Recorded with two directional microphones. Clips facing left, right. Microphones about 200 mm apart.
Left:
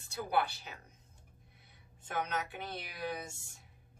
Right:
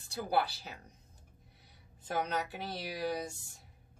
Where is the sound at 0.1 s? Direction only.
35° right (ahead or behind).